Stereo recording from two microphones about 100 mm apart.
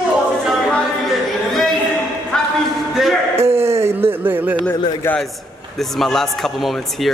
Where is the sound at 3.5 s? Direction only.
25° right (ahead or behind).